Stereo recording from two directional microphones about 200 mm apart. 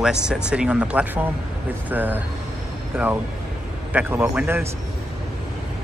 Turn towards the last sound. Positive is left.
turn(degrees=-10)  # may be behind; listen again after turning